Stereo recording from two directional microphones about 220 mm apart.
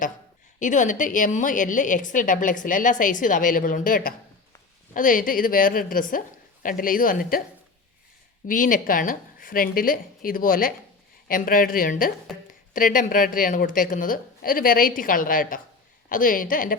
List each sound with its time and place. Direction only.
0.6 s a woman's voice: 35° left (ahead or behind)
8.4 s a woman's voice: 40° left (ahead or behind)